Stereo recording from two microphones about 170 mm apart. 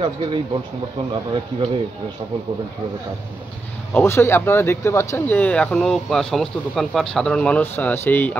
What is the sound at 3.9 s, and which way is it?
Speech, 15° left (ahead or behind).